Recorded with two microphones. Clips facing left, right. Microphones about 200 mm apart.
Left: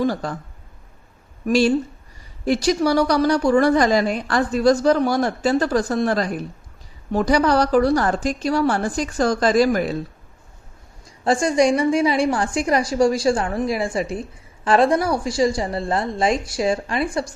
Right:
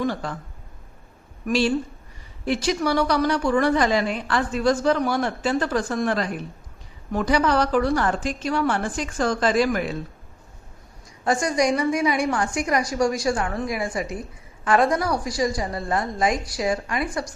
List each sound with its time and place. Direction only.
0.0 s a woman's voice: 40° left (ahead or behind)
1.5 s a woman's voice: 40° left (ahead or behind)
11.2 s a woman's voice: 30° left (ahead or behind)